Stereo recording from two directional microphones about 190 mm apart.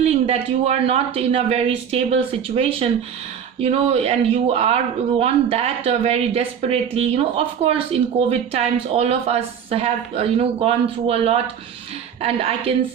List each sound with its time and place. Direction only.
0.0 s speech: 35° right (ahead or behind)